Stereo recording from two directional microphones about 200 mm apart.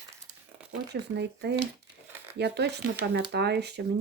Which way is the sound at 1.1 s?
60° right (ahead or behind).